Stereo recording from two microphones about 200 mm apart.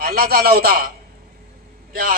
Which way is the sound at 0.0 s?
50° right (ahead or behind).